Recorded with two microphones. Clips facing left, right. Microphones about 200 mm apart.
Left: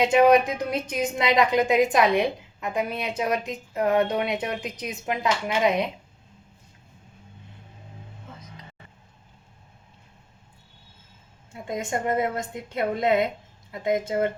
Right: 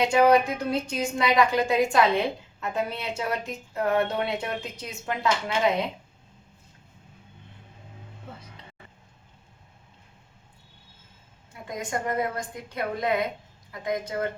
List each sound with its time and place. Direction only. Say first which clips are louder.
0.0 s a woman's voice: left 2 dB; 20° left (ahead or behind)
11.5 s a woman's voice: left 3 dB; 25° left (ahead or behind)